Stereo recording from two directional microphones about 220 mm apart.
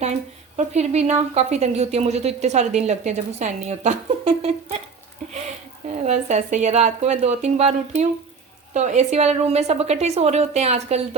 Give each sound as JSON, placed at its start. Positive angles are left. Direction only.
{"t": 0.0, "sound": "a woman's voice", "side_deg": -30}
{"t": 6.1, "sound": "a woman's voice", "side_deg": -30}